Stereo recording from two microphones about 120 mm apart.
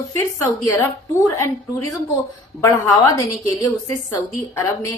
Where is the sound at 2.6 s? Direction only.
25° left (ahead or behind).